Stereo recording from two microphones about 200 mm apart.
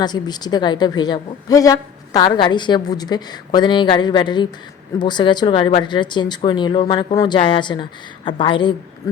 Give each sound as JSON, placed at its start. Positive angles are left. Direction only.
{"t": 0.0, "sound": "a woman's voice", "side_deg": 20}